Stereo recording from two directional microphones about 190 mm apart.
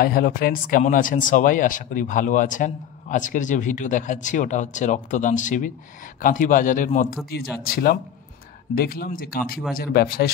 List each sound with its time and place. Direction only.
0.0 s speech: 50° left (ahead or behind)
7.2 s speech: 55° left (ahead or behind)